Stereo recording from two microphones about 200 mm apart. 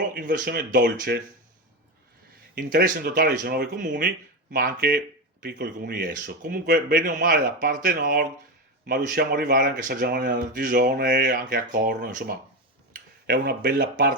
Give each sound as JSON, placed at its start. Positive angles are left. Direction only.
{"t": 0.1, "sound": "speech", "side_deg": -45}
{"t": 2.6, "sound": "speech", "side_deg": -45}